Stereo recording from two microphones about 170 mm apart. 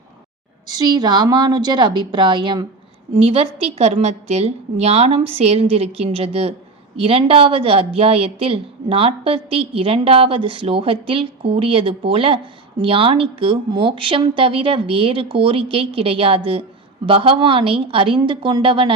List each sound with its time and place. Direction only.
0.7 s a woman's voice: 25° right (ahead or behind)